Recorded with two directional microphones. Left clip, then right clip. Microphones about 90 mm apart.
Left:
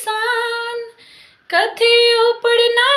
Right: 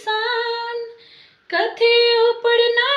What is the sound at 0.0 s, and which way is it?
Female singing, 35° right (ahead or behind).